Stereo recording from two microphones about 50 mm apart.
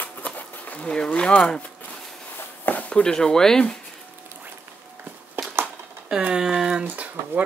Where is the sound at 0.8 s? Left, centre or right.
Centre.